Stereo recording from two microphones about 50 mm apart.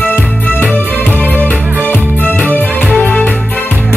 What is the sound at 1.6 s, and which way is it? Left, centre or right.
Music, right.